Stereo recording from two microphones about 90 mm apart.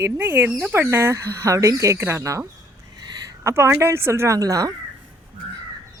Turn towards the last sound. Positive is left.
turn(degrees=-40)  # may be behind; listen again after turning